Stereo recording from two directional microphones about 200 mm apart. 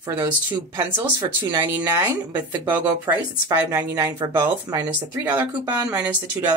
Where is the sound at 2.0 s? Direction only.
10° right (ahead or behind).